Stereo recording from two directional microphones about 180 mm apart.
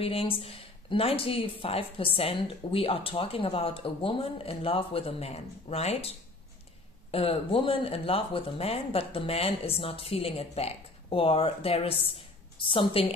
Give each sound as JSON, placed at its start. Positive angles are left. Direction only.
{"t": 0.0, "sound": "speech", "side_deg": 30}